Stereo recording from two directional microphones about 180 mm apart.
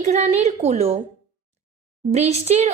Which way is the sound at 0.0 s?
40° right (ahead or behind).